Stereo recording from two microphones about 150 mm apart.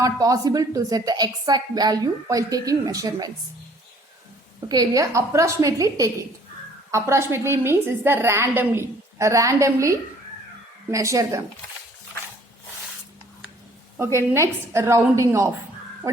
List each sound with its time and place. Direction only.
0.0 s a woman's voice: 25° right (ahead or behind)
4.7 s a woman's voice: 25° right (ahead or behind)
13.9 s a woman's voice: 15° right (ahead or behind)